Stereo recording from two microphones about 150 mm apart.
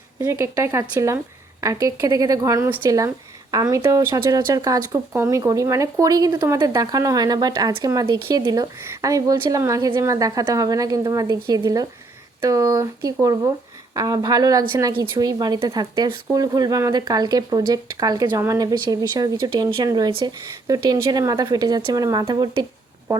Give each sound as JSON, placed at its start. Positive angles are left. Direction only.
{"t": 0.2, "sound": "speech", "side_deg": -20}